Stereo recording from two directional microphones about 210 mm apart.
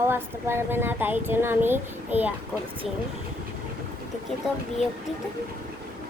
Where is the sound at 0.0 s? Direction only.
10° right (ahead or behind).